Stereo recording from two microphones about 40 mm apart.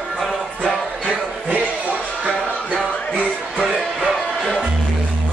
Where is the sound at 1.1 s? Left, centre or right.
Right.